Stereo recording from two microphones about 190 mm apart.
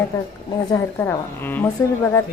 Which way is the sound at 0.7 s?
15° left (ahead or behind).